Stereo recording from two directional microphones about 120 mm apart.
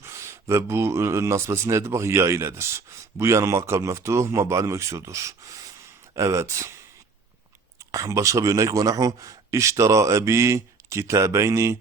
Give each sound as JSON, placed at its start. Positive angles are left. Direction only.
{"t": 0.0, "sound": "speech", "side_deg": -25}
{"t": 7.9, "sound": "speech", "side_deg": -25}